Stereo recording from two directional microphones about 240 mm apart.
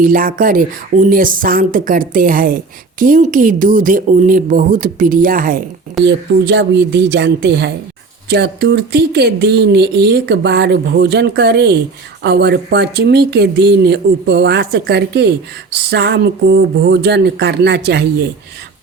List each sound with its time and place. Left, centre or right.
0.0 s speech: right
6.1 s speech: right